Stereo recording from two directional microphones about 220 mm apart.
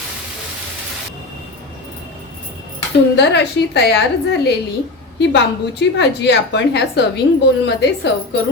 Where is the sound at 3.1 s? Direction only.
50° left (ahead or behind).